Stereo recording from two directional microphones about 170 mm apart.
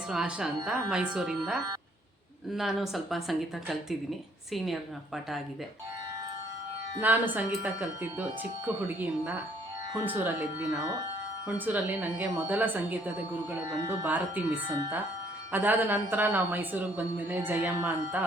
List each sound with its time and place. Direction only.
0.1 s speech: 5° right (ahead or behind)
7.0 s a woman's voice: 10° right (ahead or behind)